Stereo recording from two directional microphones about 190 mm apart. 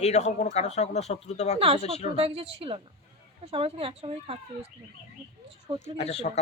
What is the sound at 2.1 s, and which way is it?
Speech, 30° right (ahead or behind).